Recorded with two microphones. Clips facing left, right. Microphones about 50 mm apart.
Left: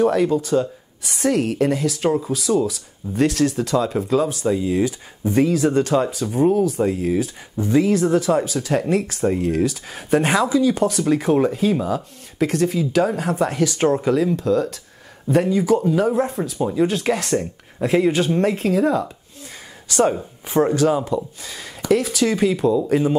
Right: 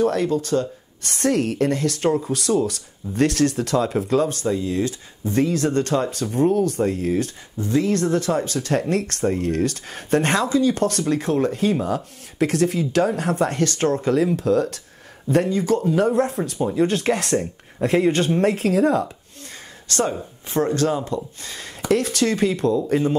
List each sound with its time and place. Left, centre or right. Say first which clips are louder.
0.0 s speech: left 3 dB; centre
7.5 s speech: left 4 dB; centre
7.8 s speech: left 2 dB; centre
14.1 s speech: even; centre
19.9 s speech: left 5 dB; centre